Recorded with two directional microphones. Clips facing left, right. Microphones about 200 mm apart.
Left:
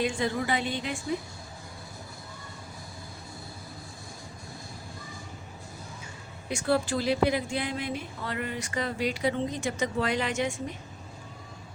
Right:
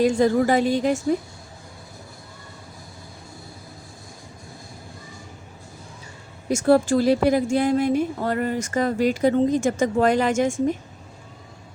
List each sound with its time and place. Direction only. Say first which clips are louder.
0.0 s a woman's voice: right 10 dB; 40° right (ahead or behind)
6.5 s a woman's voice: right 9 dB; 45° right (ahead or behind)